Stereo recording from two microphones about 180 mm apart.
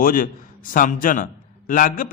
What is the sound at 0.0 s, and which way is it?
A man's voice, 50° left (ahead or behind).